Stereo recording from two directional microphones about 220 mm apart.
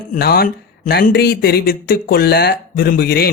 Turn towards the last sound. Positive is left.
turn(degrees=45)  # may be behind; listen again after turning